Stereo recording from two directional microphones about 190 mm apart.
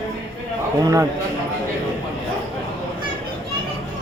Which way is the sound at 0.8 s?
20° right (ahead or behind).